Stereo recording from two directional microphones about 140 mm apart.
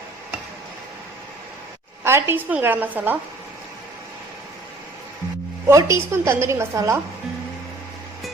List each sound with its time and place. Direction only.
2.0 s a woman's voice: 15° right (ahead or behind)
5.6 s a woman's voice: 20° right (ahead or behind)